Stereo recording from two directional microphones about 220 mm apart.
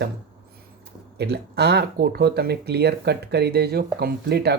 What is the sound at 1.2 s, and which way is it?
Speech, 50° right (ahead or behind).